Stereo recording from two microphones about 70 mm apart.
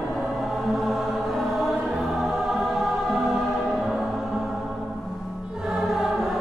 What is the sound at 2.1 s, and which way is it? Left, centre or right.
Choir, centre.